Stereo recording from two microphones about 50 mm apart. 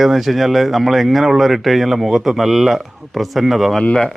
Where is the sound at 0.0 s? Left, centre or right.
Centre.